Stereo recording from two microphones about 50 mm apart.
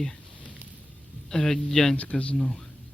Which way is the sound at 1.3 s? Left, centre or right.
Centre.